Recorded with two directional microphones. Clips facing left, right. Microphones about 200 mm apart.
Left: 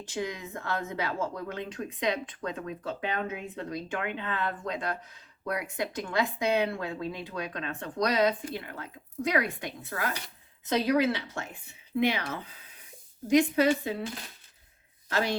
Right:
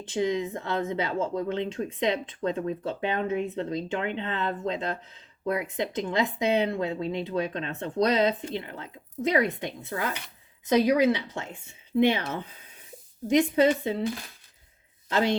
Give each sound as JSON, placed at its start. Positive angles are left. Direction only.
{"t": 0.1, "sound": "speech", "side_deg": -20}